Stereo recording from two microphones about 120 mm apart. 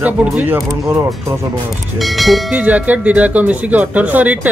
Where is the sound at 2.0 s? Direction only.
Centre (ahead or behind).